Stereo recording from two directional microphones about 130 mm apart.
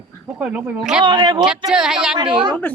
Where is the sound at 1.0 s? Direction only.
35° right (ahead or behind).